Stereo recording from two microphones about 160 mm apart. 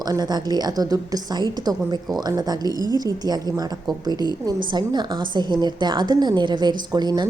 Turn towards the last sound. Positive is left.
turn(degrees=-25)  # may be behind; listen again after turning